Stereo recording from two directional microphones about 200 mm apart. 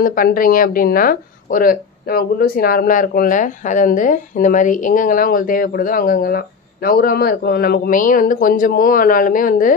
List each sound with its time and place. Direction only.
0.0 s speech: 45° left (ahead or behind)